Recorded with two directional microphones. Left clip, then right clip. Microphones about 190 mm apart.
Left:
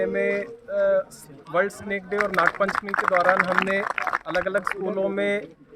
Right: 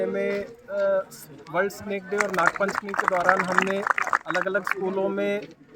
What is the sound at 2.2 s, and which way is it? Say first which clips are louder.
Speech: left 1 dB; 5° right (ahead or behind).